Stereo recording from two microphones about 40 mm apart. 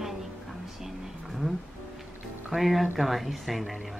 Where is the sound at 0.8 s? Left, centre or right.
Centre.